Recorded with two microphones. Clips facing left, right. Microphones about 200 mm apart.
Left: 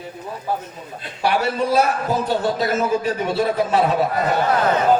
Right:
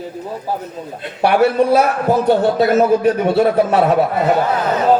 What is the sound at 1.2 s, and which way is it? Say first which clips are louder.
A man's voice: right 7 dB; 55° right (ahead or behind).